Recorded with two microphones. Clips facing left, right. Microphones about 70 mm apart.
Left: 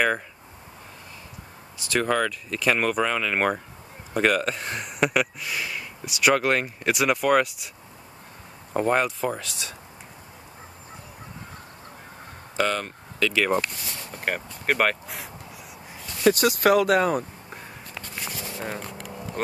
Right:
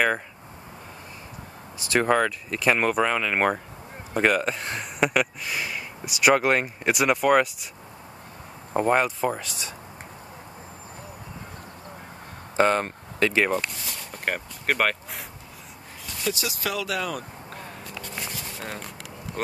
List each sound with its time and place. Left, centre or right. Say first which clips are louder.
1.9 s speech: right 2 dB; centre
8.7 s speech: right 1 dB; centre
12.5 s speech: right 4 dB; right
14.1 s speech: even; centre
16.3 s speech: left 10 dB; left
18.2 s a sound: left 2 dB; centre
19.4 s speech: left 1 dB; centre